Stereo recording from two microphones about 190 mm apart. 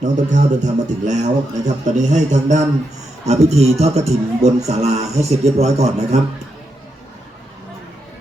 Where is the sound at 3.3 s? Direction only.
35° right (ahead or behind).